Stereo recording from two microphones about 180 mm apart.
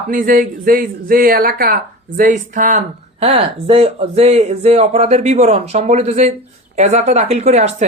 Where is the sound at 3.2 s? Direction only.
35° right (ahead or behind).